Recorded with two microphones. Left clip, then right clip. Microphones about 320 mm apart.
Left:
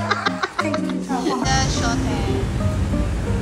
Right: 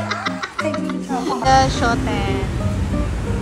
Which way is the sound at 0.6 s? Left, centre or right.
Centre.